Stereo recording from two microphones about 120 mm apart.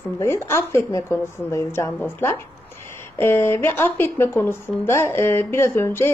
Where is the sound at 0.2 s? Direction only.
25° left (ahead or behind).